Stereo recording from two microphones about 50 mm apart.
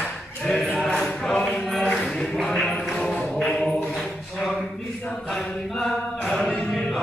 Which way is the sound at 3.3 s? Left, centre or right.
Centre.